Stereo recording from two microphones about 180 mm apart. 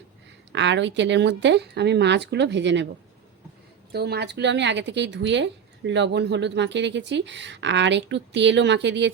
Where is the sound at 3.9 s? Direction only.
65° right (ahead or behind).